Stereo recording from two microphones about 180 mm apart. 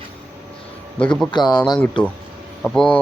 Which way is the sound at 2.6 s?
5° left (ahead or behind).